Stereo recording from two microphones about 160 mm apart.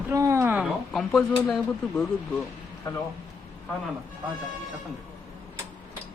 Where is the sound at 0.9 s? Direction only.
Centre (ahead or behind).